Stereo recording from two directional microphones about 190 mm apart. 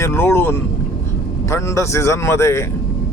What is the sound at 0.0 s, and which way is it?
A man's voice, 10° left (ahead or behind).